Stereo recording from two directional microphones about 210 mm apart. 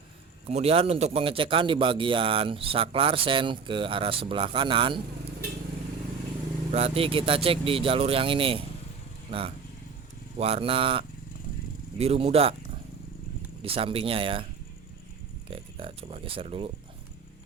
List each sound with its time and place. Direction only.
0.4 s a man's voice: 30° right (ahead or behind)
6.7 s a man's voice: 30° right (ahead or behind)
13.6 s a man's voice: 25° right (ahead or behind)
15.4 s a man's voice: 25° right (ahead or behind)